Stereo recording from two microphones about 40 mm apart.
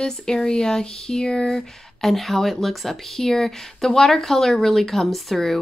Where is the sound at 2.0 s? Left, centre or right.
Centre.